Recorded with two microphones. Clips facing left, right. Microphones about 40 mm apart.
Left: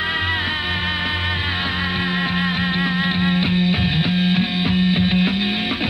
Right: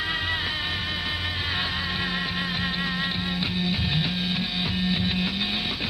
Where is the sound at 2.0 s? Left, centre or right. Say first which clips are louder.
Left 7 dB; left.